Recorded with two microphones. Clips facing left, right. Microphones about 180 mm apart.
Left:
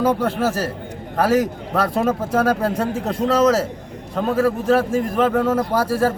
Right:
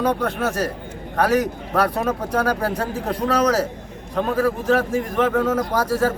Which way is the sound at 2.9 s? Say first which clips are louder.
Left 2 dB; 25° left (ahead or behind).